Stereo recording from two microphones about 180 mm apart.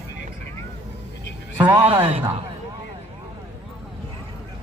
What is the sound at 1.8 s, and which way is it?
Speech, 35° right (ahead or behind).